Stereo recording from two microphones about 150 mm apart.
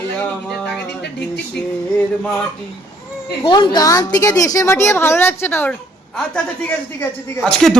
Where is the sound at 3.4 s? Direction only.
30° left (ahead or behind).